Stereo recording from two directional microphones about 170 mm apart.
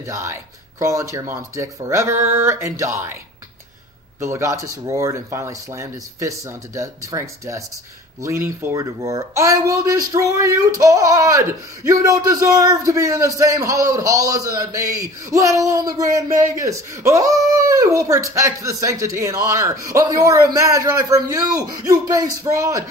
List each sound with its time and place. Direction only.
0.0 s speech: 15° right (ahead or behind)
4.2 s speech: 15° right (ahead or behind)